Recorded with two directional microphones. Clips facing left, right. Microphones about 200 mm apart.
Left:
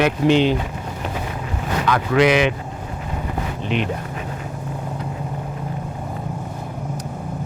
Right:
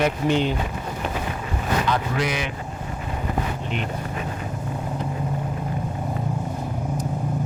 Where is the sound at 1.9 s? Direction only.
90° left.